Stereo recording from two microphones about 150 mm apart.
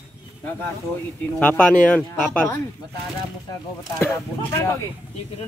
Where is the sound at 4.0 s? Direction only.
15° left (ahead or behind).